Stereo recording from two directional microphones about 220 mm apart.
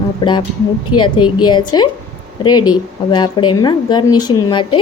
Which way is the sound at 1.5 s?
20° left (ahead or behind).